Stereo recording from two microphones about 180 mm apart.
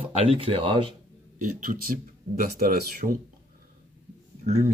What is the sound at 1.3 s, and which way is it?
Speech, 45° right (ahead or behind).